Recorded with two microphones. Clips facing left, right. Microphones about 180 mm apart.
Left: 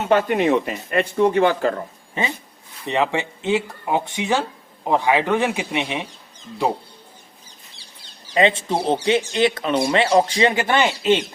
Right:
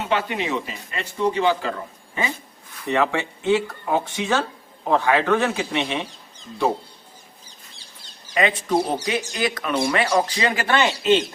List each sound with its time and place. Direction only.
0.0 s speech: 45° left (ahead or behind)
2.8 s speech: 20° left (ahead or behind)
8.3 s speech: 25° left (ahead or behind)